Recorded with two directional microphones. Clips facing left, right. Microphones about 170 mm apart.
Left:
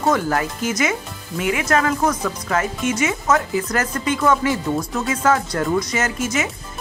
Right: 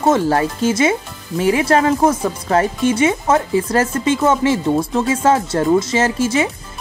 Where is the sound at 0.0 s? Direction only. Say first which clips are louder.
Right 5 dB; 25° right (ahead or behind).